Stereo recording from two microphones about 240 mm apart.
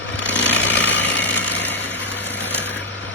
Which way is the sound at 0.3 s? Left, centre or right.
Left.